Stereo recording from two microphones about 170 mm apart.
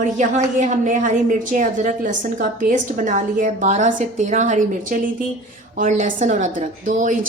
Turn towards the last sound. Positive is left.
turn(degrees=-50)  # may be behind; listen again after turning